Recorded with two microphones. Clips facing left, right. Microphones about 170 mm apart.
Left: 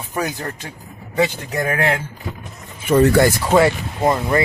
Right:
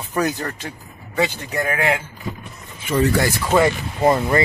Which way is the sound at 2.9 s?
55° left (ahead or behind).